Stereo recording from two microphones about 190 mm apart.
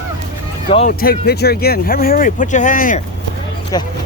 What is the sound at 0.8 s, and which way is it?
Speech, 50° left (ahead or behind).